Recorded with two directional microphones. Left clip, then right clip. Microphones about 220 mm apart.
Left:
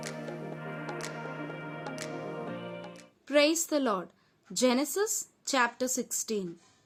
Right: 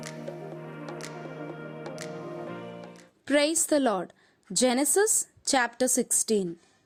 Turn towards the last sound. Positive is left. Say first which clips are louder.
# right 7 dB
turn(degrees=-25)  # may be behind; listen again after turning